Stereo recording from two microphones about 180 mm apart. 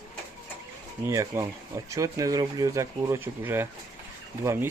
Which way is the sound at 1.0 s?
15° right (ahead or behind).